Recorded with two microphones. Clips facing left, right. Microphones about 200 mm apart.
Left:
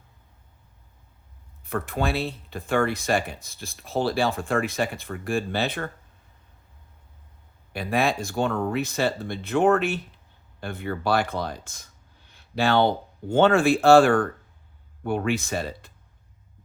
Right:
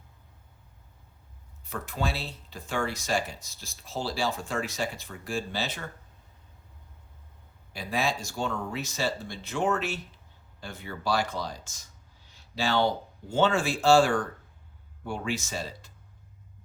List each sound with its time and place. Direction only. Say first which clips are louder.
1.6 s speech: left 6 dB; 55° left (ahead or behind)
7.7 s speech: left 6 dB; 60° left (ahead or behind)